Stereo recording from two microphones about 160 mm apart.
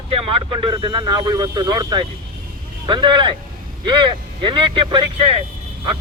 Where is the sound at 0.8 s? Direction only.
25° right (ahead or behind).